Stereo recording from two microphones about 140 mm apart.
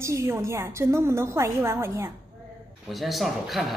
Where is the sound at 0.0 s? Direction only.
20° right (ahead or behind).